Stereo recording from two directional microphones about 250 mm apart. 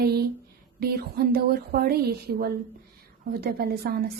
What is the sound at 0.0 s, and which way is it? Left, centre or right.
Speech, right.